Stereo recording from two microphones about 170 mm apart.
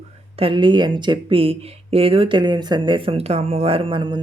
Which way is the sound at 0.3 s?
30° right (ahead or behind).